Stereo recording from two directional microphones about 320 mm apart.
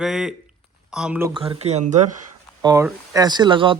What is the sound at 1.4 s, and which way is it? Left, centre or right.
Speech, centre.